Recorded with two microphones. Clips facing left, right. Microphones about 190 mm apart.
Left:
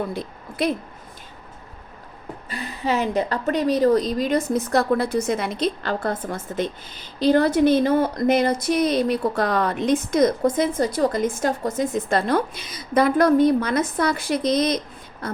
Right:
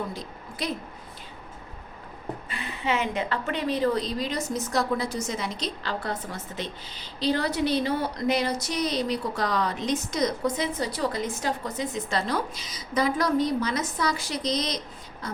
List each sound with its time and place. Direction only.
0.1 s a woman's voice: 60° left (ahead or behind)
2.5 s a woman's voice: 40° left (ahead or behind); by 14.8 s 55° left (ahead or behind)